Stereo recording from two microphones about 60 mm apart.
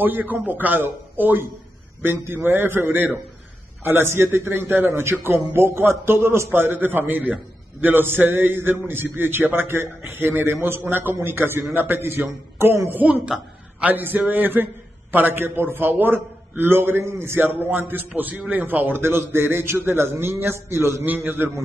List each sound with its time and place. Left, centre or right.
0.0 s a man's voice: right
13.0 s a woman's voice: right
17.6 s a man's voice: right
21.0 s a man's voice: right